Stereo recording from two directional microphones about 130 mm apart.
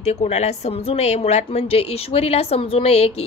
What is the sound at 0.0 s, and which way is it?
A woman's voice, 60° left (ahead or behind).